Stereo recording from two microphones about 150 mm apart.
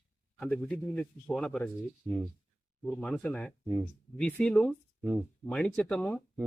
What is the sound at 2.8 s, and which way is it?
A man's voice, 5° left (ahead or behind).